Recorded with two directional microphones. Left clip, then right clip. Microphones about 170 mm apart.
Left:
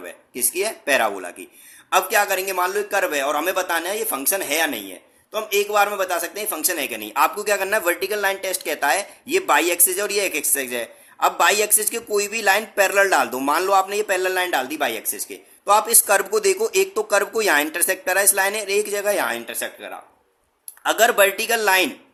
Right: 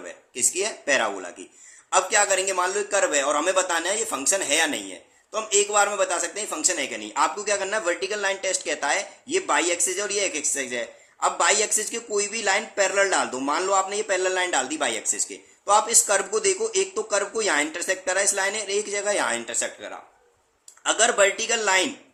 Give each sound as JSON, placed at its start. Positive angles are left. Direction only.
{"t": 0.0, "sound": "a man's voice", "side_deg": 25}
{"t": 20.8, "sound": "a man's voice", "side_deg": 35}